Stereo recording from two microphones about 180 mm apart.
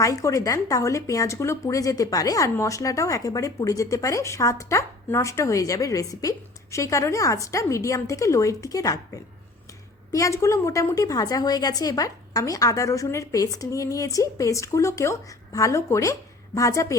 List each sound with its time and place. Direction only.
0.0 s speech: 20° left (ahead or behind)
10.1 s speech: 15° left (ahead or behind)